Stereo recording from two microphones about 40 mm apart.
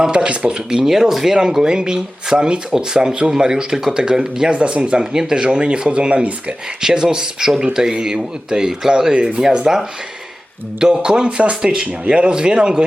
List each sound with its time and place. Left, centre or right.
0.0 s speech: centre
0.9 s speech: centre
4.5 s speech: right
9.3 s speech: right
11.0 s speech: right